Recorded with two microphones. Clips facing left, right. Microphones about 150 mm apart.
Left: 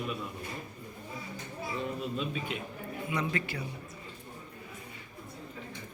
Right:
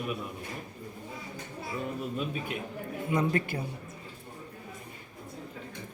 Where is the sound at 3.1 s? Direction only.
45° right (ahead or behind).